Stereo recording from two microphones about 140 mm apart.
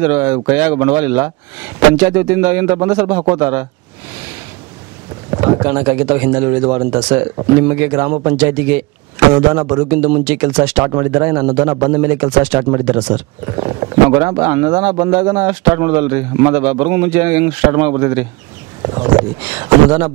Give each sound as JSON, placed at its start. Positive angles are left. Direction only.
{"t": 0.0, "sound": "speech", "side_deg": -15}
{"t": 5.3, "sound": "a sound", "side_deg": -30}
{"t": 5.6, "sound": "speech", "side_deg": -15}
{"t": 13.5, "sound": "speech", "side_deg": -30}
{"t": 18.8, "sound": "speech", "side_deg": -30}
{"t": 19.1, "sound": "speech", "side_deg": -15}